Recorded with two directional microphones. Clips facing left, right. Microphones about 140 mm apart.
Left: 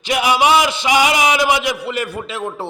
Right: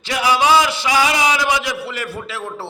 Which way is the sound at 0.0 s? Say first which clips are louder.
Left 2 dB; 20° left (ahead or behind).